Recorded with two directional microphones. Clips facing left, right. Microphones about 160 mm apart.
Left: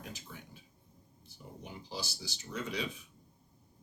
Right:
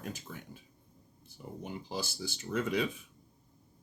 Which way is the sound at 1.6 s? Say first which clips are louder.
Right 4 dB; 50° right (ahead or behind).